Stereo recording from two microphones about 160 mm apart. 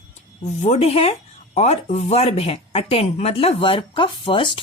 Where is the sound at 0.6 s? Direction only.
40° left (ahead or behind).